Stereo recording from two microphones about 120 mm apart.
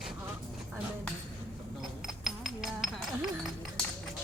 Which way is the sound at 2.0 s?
5° right (ahead or behind).